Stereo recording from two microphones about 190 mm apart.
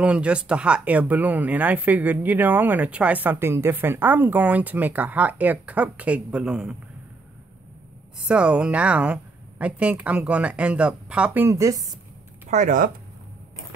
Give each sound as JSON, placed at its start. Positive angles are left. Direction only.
{"t": 0.0, "sound": "speech", "side_deg": -5}
{"t": 8.3, "sound": "speech", "side_deg": -5}
{"t": 12.4, "sound": "speech", "side_deg": -40}